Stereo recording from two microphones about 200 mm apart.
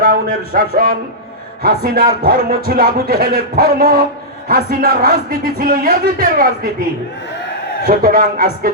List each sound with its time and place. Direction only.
0.0 s speech: 45° right (ahead or behind)
7.9 s speech: 45° right (ahead or behind)